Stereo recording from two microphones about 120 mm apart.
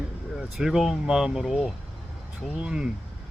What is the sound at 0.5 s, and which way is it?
Speech, 5° right (ahead or behind).